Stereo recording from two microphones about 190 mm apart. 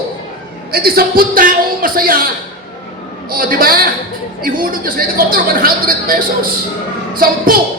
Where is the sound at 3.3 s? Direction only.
50° right (ahead or behind).